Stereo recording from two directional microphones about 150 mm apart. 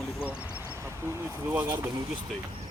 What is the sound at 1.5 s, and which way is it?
Speech, 15° right (ahead or behind).